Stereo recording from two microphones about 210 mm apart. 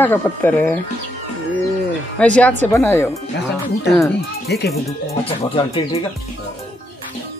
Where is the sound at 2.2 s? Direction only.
5° left (ahead or behind).